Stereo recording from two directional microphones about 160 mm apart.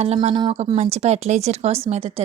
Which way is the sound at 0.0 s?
45° right (ahead or behind).